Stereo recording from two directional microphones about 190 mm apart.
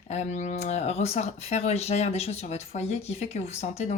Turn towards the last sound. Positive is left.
turn(degrees=35)  # may be behind; listen again after turning